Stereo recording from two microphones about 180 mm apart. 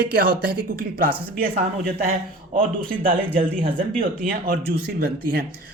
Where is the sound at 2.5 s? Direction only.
50° right (ahead or behind).